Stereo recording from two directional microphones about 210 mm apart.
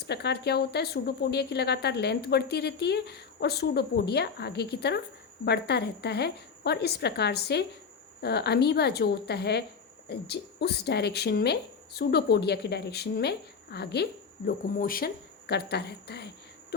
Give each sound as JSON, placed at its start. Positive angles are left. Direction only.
{"t": 0.1, "sound": "speech", "side_deg": 50}